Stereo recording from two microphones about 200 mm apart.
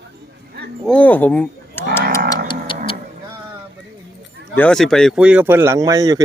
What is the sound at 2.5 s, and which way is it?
Music, 25° left (ahead or behind).